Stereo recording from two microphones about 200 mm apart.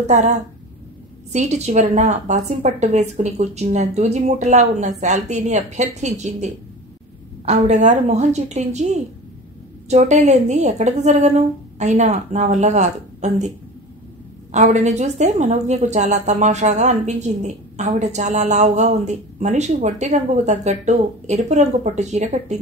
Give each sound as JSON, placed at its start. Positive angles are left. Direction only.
{"t": 0.0, "sound": "a woman's voice", "side_deg": -35}
{"t": 14.5, "sound": "a woman's voice", "side_deg": -35}